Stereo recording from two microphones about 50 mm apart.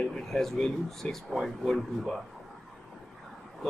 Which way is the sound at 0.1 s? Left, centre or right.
Centre.